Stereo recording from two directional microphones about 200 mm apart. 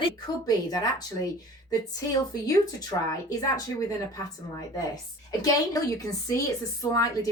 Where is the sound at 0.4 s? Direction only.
20° left (ahead or behind).